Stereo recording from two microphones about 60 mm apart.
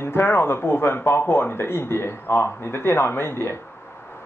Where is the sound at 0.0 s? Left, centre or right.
Left.